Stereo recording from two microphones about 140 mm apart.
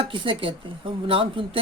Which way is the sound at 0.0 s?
35° right (ahead or behind).